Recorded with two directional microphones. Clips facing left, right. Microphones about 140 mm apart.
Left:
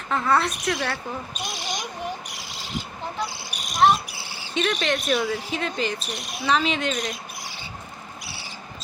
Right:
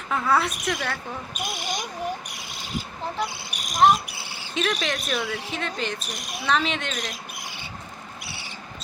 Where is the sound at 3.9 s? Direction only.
55° right (ahead or behind).